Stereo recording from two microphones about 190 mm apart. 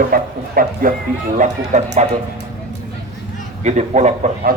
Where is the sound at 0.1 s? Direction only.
50° right (ahead or behind).